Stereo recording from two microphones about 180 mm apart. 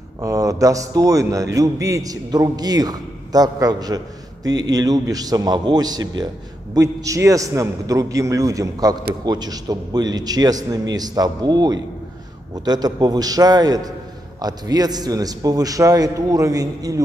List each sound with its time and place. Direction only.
0.2 s a man's voice: 20° right (ahead or behind)